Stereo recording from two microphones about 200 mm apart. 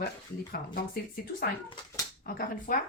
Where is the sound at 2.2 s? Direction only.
45° left (ahead or behind).